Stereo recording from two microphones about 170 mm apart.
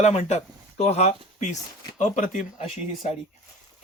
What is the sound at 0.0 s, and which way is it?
Speech, 40° left (ahead or behind).